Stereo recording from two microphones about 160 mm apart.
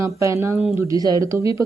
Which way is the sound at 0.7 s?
20° right (ahead or behind).